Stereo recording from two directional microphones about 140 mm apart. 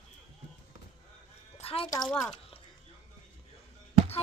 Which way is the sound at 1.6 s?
45° left (ahead or behind).